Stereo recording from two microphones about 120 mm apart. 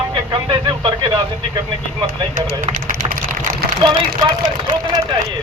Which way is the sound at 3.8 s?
40° right (ahead or behind).